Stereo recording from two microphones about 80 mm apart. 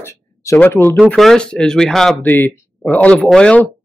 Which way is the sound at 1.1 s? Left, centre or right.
Centre.